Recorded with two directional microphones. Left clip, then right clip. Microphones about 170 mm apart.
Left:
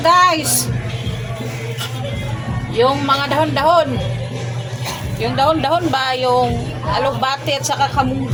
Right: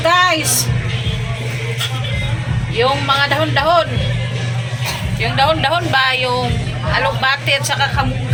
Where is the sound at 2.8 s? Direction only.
5° left (ahead or behind).